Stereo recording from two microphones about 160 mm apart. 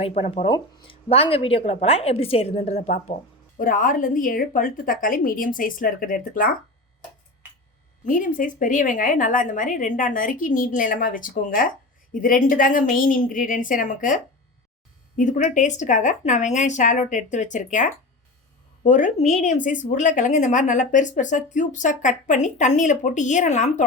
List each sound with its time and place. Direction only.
0.0 s a woman's voice: 40° left (ahead or behind)
3.6 s a woman's voice: 55° left (ahead or behind)
8.0 s a woman's voice: 55° left (ahead or behind)